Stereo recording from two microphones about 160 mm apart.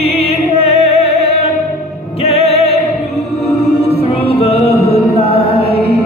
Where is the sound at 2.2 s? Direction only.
40° left (ahead or behind).